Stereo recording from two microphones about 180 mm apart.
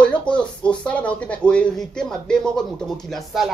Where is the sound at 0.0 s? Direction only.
5° left (ahead or behind).